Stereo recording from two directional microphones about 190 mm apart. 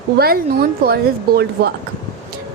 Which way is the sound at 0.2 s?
55° right (ahead or behind).